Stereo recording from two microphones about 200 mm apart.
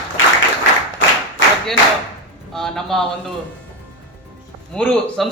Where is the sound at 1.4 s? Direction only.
65° left (ahead or behind).